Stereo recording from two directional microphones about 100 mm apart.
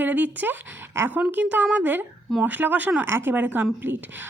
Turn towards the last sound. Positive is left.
turn(degrees=-20)  # may be behind; listen again after turning